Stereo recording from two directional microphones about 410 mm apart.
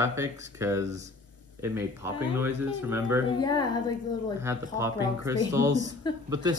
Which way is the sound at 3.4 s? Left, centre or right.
Centre.